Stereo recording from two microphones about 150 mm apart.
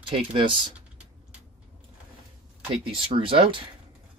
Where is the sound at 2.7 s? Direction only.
35° right (ahead or behind).